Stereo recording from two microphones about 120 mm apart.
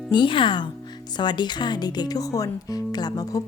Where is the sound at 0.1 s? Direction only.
40° left (ahead or behind).